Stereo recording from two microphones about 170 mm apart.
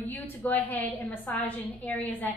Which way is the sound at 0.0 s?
10° left (ahead or behind).